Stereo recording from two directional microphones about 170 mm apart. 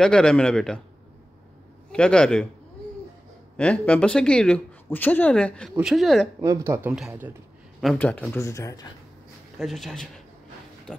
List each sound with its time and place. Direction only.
0.0 s a man's voice: 5° left (ahead or behind)
1.9 s a man's voice: 5° left (ahead or behind)
3.5 s a man's voice: 10° left (ahead or behind)
6.4 s speech: 15° right (ahead or behind)
7.8 s speech: 5° left (ahead or behind)
9.6 s a man's voice: centre (ahead or behind)